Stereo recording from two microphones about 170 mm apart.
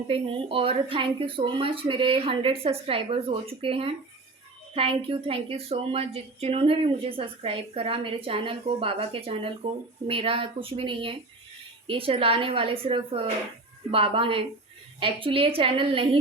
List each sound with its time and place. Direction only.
0.1 s a woman's voice: 35° right (ahead or behind)